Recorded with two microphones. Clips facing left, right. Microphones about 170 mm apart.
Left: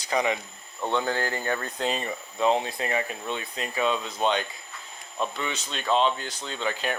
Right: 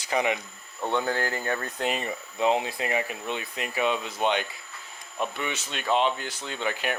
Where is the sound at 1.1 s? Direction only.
25° left (ahead or behind).